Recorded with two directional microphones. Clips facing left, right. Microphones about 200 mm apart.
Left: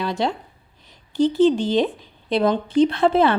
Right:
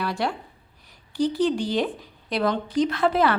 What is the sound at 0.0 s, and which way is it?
Speech, 20° left (ahead or behind).